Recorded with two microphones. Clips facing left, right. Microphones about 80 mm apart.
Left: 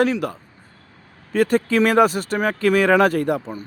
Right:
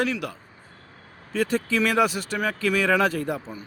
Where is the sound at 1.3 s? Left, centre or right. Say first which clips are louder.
Left 6 dB; left.